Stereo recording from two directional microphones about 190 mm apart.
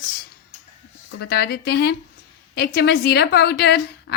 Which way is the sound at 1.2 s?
55° left (ahead or behind).